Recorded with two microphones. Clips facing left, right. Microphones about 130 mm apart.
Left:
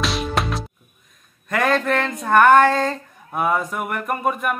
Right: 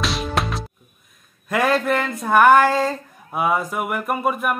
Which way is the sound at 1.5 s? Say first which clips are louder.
Even; 5° right (ahead or behind).